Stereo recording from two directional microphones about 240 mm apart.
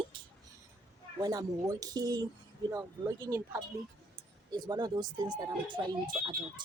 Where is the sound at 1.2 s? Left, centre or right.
Centre.